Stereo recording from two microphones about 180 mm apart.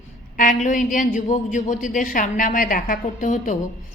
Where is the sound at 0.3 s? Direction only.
45° left (ahead or behind).